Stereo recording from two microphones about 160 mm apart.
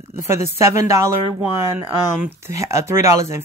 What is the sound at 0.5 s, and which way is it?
Speech, 15° right (ahead or behind).